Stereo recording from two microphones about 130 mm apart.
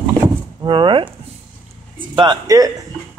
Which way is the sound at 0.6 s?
35° right (ahead or behind).